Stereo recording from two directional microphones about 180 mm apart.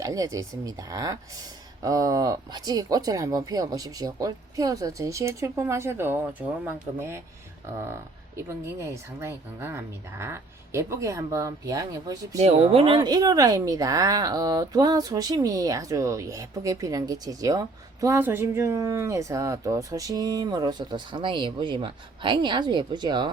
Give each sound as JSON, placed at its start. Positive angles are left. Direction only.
{"t": 0.0, "sound": "speech", "side_deg": -20}
{"t": 8.4, "sound": "speech", "side_deg": -15}
{"t": 12.4, "sound": "speech", "side_deg": -35}